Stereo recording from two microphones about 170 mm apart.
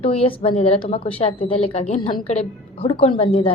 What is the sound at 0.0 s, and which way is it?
A woman's voice, 35° left (ahead or behind).